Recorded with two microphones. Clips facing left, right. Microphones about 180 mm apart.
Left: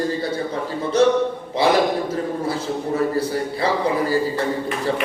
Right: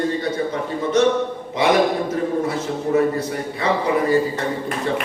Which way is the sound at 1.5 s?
30° left (ahead or behind).